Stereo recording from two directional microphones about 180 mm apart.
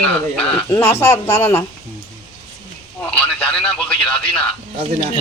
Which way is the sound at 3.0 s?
5° left (ahead or behind).